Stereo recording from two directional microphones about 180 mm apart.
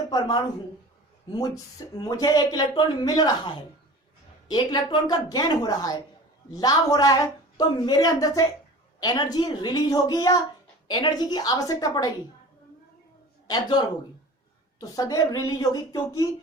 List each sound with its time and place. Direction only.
0.1 s a woman's voice: 25° left (ahead or behind)
2.0 s a woman's voice: 20° left (ahead or behind)
13.5 s a woman's voice: 25° left (ahead or behind)